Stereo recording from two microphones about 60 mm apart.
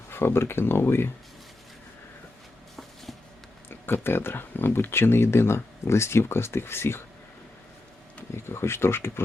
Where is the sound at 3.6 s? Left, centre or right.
Left.